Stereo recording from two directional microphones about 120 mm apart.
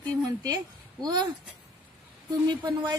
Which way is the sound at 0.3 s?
30° right (ahead or behind).